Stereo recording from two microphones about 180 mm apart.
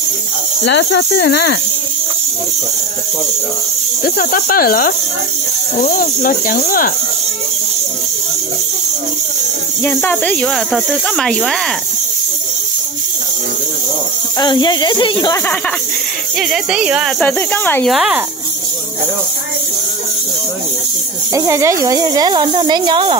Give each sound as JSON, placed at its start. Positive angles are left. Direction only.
{"t": 0.7, "sound": "speech", "side_deg": 75}
{"t": 4.0, "sound": "speech", "side_deg": 50}
{"t": 9.8, "sound": "speech", "side_deg": 10}
{"t": 14.4, "sound": "speech", "side_deg": 25}
{"t": 16.3, "sound": "speech", "side_deg": 0}
{"t": 17.2, "sound": "speech", "side_deg": 10}
{"t": 17.8, "sound": "speech", "side_deg": 0}
{"t": 21.3, "sound": "a woman's voice", "side_deg": -15}